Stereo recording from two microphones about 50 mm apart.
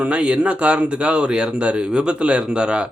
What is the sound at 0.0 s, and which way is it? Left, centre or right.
A man's voice, right.